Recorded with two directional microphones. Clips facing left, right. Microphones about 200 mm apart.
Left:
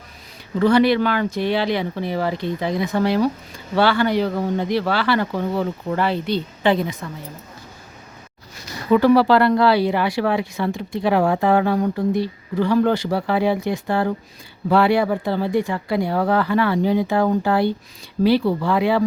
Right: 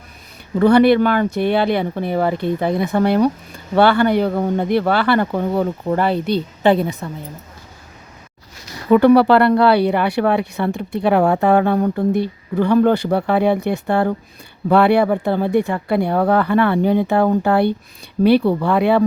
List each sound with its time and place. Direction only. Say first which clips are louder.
0.6 s speech: right 4 dB; 55° right (ahead or behind)
7.0 s speech: right 4 dB; 30° right (ahead or behind)
8.9 s speech: right 3 dB; 55° right (ahead or behind)